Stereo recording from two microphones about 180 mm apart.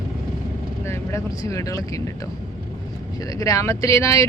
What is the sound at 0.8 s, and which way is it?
Speech, 15° left (ahead or behind).